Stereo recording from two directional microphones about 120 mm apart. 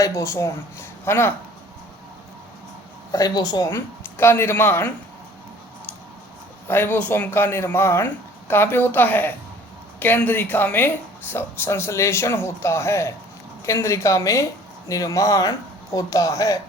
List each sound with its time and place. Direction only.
0.0 s speech: 25° left (ahead or behind)
3.1 s a woman's voice: 30° left (ahead or behind)
3.7 s speech: 20° left (ahead or behind)
6.7 s speech: 15° left (ahead or behind)